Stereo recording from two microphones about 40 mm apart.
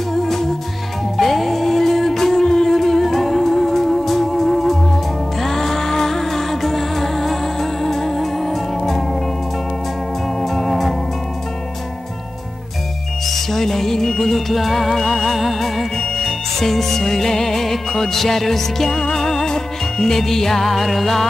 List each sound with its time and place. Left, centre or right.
0.1 s music: centre
10.4 s music: centre
13.2 s music: centre